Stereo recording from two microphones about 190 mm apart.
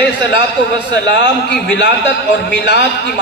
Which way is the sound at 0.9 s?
65° left (ahead or behind).